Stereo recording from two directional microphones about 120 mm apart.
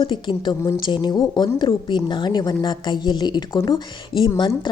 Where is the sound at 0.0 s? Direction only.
40° left (ahead or behind).